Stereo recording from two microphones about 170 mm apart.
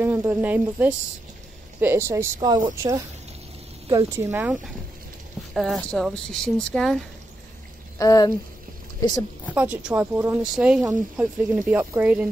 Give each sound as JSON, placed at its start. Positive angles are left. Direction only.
{"t": 0.0, "sound": "speech", "side_deg": -10}
{"t": 5.5, "sound": "speech", "side_deg": 0}
{"t": 8.0, "sound": "speech", "side_deg": 20}
{"t": 9.5, "sound": "speech", "side_deg": -10}